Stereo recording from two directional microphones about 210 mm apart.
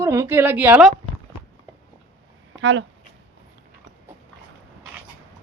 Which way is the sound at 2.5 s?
60° right (ahead or behind).